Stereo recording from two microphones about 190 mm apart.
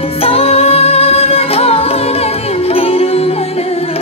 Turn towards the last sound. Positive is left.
turn(degrees=30)  # may be behind; listen again after turning